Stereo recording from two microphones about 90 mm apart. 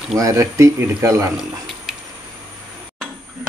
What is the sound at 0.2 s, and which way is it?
Speech, 35° right (ahead or behind).